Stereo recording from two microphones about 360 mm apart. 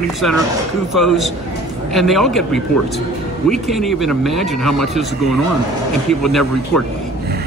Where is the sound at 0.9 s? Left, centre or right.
Centre.